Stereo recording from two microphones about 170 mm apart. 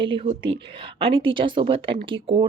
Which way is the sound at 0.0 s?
35° right (ahead or behind).